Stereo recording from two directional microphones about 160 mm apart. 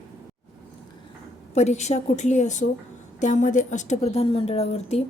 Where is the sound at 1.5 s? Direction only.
45° left (ahead or behind).